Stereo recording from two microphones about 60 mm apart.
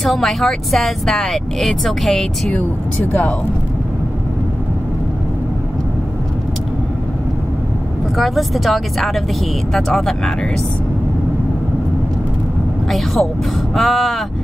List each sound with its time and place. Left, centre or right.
0.0 s speech: centre
3.1 s speech: left
8.2 s speech: centre
12.9 s speech: centre